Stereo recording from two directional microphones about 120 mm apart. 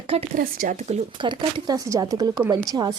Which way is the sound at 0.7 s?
70° right (ahead or behind).